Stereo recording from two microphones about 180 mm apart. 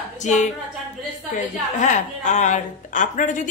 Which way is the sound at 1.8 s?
40° left (ahead or behind).